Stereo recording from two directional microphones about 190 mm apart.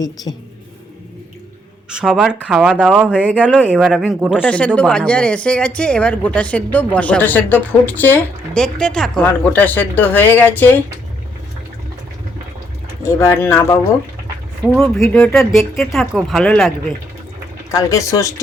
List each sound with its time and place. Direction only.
0.3 s a woman's voice: 20° left (ahead or behind)
1.9 s speech: 5° right (ahead or behind)
4.4 s speech: 5° left (ahead or behind)
13.1 s speech: 10° left (ahead or behind)
14.6 s speech: centre (ahead or behind)
17.7 s speech: 15° left (ahead or behind)